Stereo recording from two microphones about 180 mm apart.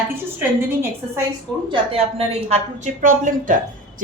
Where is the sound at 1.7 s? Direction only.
35° right (ahead or behind).